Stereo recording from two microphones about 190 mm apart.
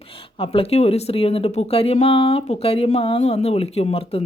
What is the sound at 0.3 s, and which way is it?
Speech, 30° left (ahead or behind).